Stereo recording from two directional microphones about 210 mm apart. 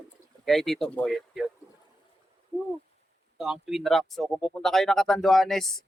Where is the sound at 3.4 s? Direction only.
Centre (ahead or behind).